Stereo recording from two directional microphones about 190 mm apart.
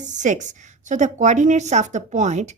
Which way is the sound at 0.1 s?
40° right (ahead or behind).